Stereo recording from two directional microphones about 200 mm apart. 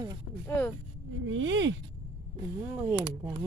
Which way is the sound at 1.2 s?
75° right (ahead or behind).